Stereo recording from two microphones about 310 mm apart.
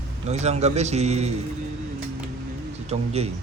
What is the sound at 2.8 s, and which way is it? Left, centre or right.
Speech, centre.